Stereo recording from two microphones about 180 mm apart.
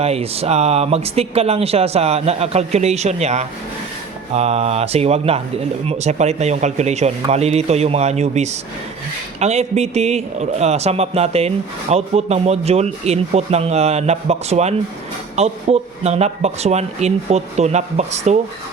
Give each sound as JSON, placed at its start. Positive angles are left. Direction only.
{"t": 0.0, "sound": "a man's voice", "side_deg": -35}